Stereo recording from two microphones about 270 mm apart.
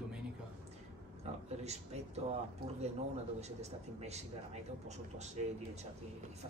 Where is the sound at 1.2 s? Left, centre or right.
Right.